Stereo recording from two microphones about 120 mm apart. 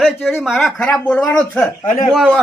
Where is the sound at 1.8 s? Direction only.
90° left.